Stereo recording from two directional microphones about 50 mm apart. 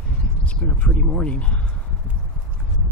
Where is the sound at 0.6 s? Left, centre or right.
Centre.